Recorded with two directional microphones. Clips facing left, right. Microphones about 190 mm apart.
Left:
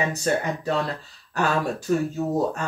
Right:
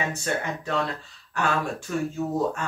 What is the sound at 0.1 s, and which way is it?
Speech, 40° left (ahead or behind).